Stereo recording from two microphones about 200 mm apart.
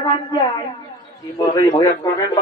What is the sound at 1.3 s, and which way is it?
Speech, 20° left (ahead or behind).